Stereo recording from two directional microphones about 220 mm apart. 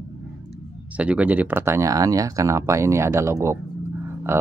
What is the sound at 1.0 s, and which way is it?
Speech, 5° right (ahead or behind).